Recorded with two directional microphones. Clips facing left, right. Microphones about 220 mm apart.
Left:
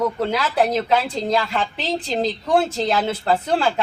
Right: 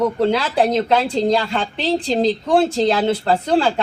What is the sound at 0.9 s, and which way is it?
A woman's voice, 35° right (ahead or behind).